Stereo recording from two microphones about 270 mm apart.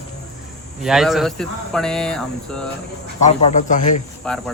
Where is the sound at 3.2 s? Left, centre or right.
Left.